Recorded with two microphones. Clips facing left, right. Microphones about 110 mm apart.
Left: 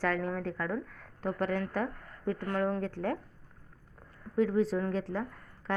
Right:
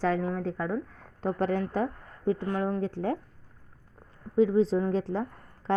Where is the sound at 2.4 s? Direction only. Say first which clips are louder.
Right 2 dB; 10° right (ahead or behind).